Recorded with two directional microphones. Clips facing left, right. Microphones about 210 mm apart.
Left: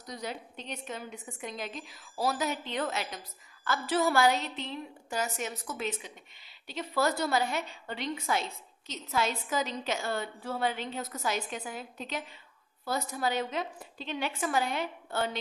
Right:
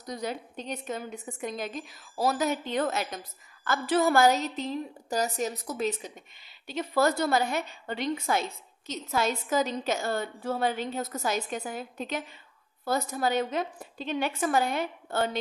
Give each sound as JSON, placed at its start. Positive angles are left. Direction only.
{"t": 0.1, "sound": "a woman's voice", "side_deg": -45}
{"t": 6.7, "sound": "a woman's voice", "side_deg": -50}